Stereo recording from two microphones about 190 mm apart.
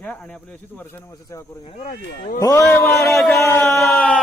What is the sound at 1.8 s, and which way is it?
Speech, 60° left (ahead or behind).